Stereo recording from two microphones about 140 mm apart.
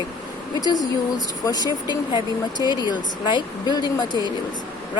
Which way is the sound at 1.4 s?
25° left (ahead or behind).